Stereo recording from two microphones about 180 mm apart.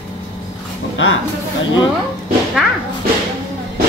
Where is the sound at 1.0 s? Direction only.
90° left.